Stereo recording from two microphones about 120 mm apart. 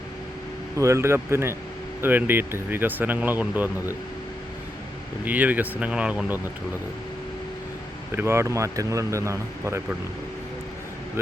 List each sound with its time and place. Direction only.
0.8 s speech: 25° right (ahead or behind)
5.2 s speech: 15° right (ahead or behind)
8.1 s speech: 20° right (ahead or behind)